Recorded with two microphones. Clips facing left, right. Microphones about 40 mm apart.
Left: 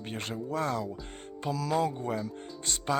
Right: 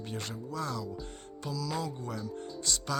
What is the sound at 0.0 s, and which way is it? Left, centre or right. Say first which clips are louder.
Speech: left 3 dB; left.